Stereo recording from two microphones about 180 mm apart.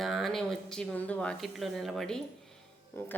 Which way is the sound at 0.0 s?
Centre (ahead or behind).